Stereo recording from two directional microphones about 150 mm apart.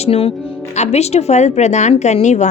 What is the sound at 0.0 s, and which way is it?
A woman's voice, 40° left (ahead or behind).